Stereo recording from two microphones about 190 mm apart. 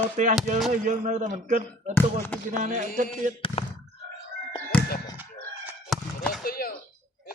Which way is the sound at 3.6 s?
30° left (ahead or behind).